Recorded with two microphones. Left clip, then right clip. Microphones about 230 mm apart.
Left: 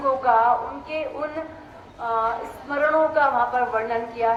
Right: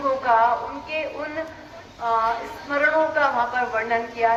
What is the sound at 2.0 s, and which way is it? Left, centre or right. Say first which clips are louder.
A woman's voice: right 2 dB; left.